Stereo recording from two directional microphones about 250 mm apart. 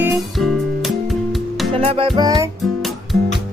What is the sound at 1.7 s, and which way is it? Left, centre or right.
Music, right.